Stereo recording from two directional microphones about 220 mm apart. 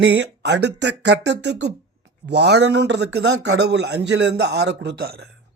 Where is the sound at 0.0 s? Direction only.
50° right (ahead or behind).